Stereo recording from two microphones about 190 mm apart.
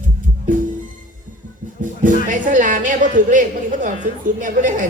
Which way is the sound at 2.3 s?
45° right (ahead or behind).